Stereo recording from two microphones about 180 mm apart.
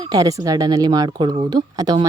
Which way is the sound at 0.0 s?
20° right (ahead or behind).